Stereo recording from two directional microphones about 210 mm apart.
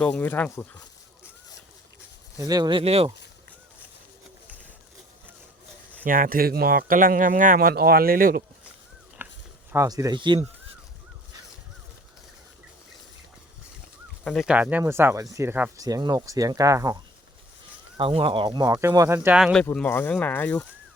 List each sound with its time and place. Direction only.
0.0 s speech: 10° left (ahead or behind)
2.5 s speech: 20° right (ahead or behind)
6.1 s speech: 40° right (ahead or behind)
9.2 s a sound: 10° right (ahead or behind)
9.7 s speech: 15° right (ahead or behind)
14.3 s speech: centre (ahead or behind)
19.6 s speech: 10° left (ahead or behind)